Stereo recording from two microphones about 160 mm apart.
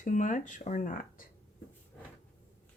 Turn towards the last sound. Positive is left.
turn(degrees=55)  # may be behind; listen again after turning